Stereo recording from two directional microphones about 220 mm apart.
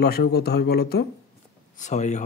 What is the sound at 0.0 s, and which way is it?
Speech, 45° left (ahead or behind).